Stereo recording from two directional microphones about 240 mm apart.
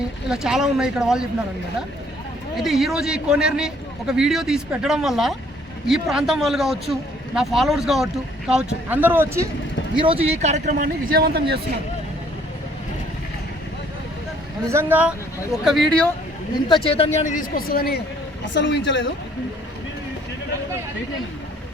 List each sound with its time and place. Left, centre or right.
0.3 s a man's voice: centre
2.6 s a man's voice: centre
10.0 s speech: right
14.7 s a man's voice: centre
16.6 s a woman's voice: left